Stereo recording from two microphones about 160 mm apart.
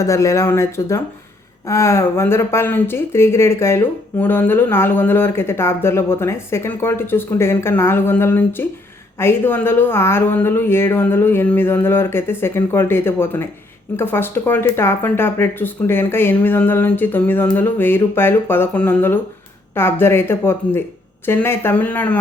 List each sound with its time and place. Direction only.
0.0 s speech: 20° left (ahead or behind)